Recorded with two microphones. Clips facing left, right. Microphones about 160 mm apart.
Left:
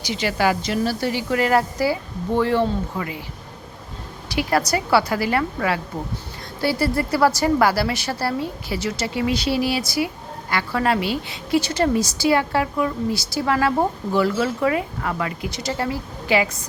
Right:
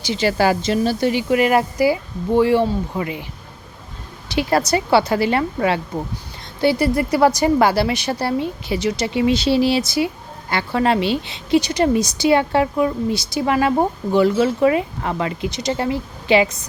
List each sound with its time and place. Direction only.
0.0 s a woman's voice: 30° right (ahead or behind)
4.3 s a woman's voice: 25° right (ahead or behind)